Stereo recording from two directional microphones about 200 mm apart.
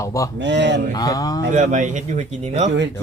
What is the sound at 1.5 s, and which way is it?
Speech, 40° right (ahead or behind).